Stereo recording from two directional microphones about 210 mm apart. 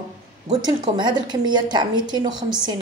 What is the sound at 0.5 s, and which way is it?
A woman's voice, 20° right (ahead or behind).